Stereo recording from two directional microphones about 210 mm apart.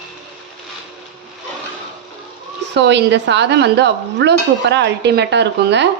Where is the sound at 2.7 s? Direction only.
55° right (ahead or behind).